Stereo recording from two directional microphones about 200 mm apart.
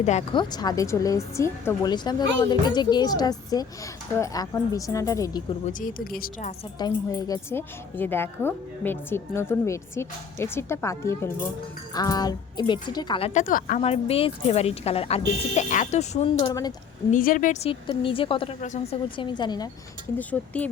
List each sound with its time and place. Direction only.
0.0 s a woman's voice: 35° left (ahead or behind); by 5.4 s 15° left (ahead or behind)
5.6 s speech: 45° left (ahead or behind)
6.7 s a woman's voice: 20° left (ahead or behind)
17.1 s speech: 45° left (ahead or behind); by 18.5 s 25° left (ahead or behind)
18.6 s speech: 35° left (ahead or behind)
19.1 s speech: 25° left (ahead or behind)
20.1 s a woman's voice: 5° left (ahead or behind)